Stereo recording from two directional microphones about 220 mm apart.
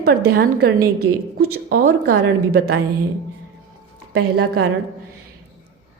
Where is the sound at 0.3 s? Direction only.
45° right (ahead or behind).